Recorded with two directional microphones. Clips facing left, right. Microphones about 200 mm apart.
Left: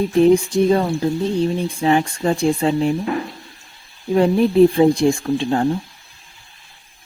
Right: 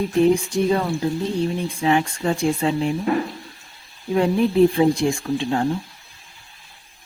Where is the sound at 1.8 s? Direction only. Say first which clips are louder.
Left 2 dB; 35° left (ahead or behind).